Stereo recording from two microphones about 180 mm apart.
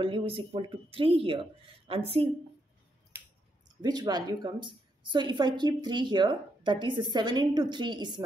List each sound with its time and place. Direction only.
0.0 s speech: 30° right (ahead or behind)
3.8 s a woman's voice: 20° right (ahead or behind)